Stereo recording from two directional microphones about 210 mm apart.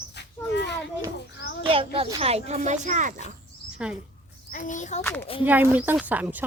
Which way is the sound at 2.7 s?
35° right (ahead or behind).